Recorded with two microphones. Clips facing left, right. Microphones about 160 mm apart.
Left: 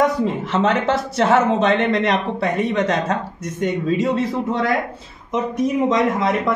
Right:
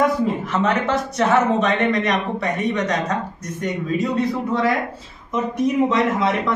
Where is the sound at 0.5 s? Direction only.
30° left (ahead or behind).